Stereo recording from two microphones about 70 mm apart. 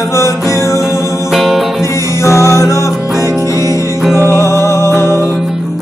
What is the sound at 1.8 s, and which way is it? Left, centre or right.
Music, left.